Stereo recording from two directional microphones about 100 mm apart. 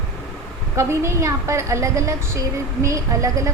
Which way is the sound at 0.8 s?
30° right (ahead or behind).